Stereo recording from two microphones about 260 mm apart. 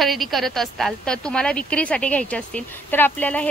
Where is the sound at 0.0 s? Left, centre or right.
Centre.